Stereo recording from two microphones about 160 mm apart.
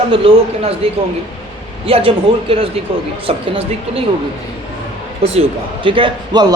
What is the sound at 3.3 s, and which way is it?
Speech, 35° right (ahead or behind).